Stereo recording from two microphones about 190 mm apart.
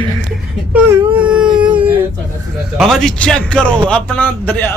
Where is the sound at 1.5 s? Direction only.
25° right (ahead or behind).